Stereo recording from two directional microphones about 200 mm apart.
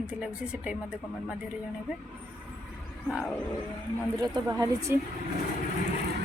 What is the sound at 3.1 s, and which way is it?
Speech, 5° left (ahead or behind).